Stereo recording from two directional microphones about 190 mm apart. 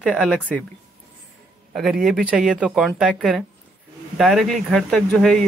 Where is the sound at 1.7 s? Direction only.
Centre (ahead or behind).